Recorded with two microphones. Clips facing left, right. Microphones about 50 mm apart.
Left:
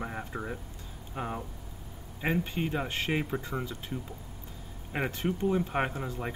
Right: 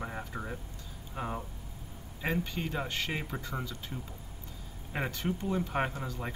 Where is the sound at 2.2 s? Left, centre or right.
Centre.